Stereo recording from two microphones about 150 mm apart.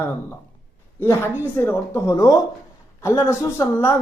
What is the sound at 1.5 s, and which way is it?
A woman's voice, 15° left (ahead or behind).